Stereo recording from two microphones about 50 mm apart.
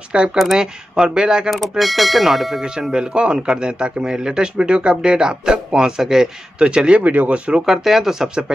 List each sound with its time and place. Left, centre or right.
0.1 s a man's voice: centre
1.5 s speech: centre
2.9 s a man's voice: centre
7.0 s speech: right
7.6 s a man's voice: centre